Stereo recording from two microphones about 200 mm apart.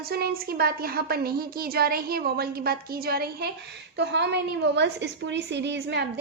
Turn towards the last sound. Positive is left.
turn(degrees=-60)  # may be behind; listen again after turning